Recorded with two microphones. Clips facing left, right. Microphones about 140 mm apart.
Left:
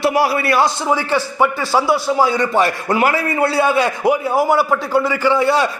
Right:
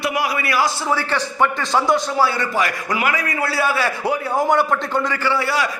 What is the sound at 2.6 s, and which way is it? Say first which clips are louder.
A man's voice: left 5 dB; 30° left (ahead or behind).